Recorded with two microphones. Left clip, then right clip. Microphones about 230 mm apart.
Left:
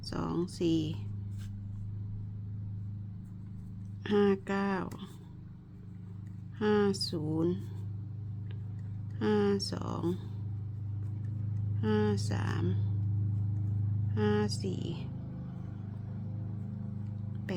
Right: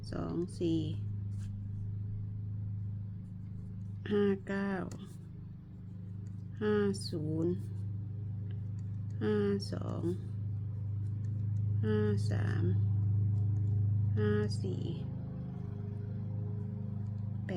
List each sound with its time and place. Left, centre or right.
0.0 s speech: left
4.0 s speech: left
6.6 s speech: left
9.1 s speech: left
11.8 s speech: left
14.2 s speech: left